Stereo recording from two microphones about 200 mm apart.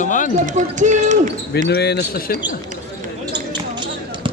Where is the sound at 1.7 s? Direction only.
55° left (ahead or behind).